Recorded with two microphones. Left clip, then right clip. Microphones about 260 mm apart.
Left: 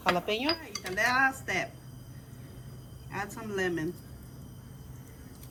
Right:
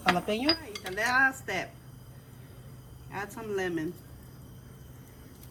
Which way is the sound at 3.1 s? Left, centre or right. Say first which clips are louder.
Right 1 dB; centre.